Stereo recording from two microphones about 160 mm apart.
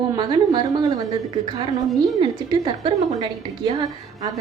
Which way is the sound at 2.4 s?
25° right (ahead or behind).